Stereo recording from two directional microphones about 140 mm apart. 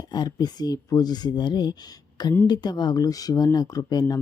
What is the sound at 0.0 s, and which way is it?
Speech, 30° left (ahead or behind).